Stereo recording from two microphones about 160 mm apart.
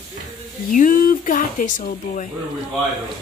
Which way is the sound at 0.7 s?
55° left (ahead or behind).